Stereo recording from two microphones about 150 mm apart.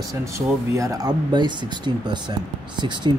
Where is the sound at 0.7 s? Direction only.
20° right (ahead or behind).